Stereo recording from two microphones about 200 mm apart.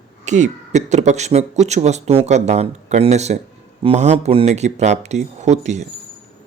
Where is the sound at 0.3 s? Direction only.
35° right (ahead or behind).